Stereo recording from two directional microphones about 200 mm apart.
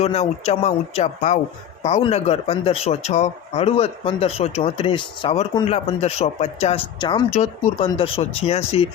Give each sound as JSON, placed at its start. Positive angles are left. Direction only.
{"t": 0.0, "sound": "speech", "side_deg": 30}